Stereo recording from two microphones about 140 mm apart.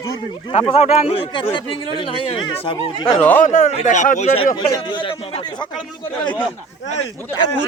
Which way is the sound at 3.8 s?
60° left (ahead or behind).